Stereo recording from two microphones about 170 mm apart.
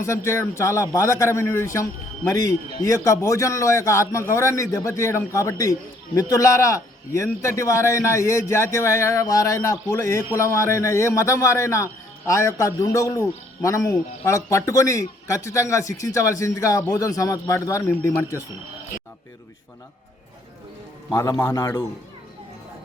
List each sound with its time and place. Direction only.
0.3 s a man's voice: 15° left (ahead or behind)
21.1 s a man's voice: 20° left (ahead or behind)